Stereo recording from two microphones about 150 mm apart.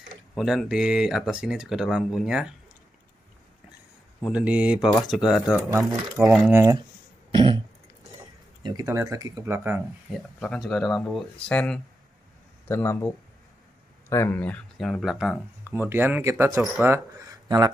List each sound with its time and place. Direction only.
0.3 s speech: centre (ahead or behind)
4.3 s speech: 10° right (ahead or behind)
6.5 s speech: 20° right (ahead or behind)
7.2 s throat clearing: 35° right (ahead or behind)
8.6 s speech: 20° right (ahead or behind)
10.1 s speech: centre (ahead or behind)
12.6 s speech: 15° left (ahead or behind); by 15.4 s 5° right (ahead or behind)
15.7 s speech: 15° right (ahead or behind)